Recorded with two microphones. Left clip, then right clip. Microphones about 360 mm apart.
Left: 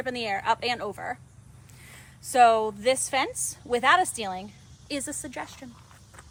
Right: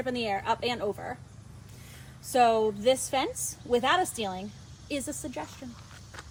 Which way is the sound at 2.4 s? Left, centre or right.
Left.